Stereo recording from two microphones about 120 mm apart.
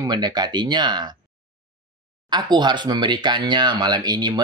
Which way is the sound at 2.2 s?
35° right (ahead or behind).